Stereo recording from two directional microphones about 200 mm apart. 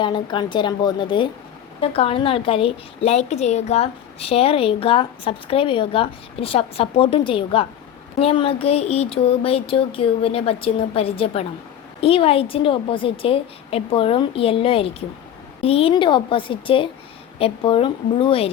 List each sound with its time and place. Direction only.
0.0 s a woman's voice: 25° left (ahead or behind)